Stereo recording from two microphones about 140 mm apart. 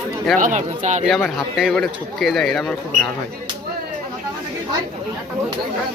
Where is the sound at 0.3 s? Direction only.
70° right (ahead or behind).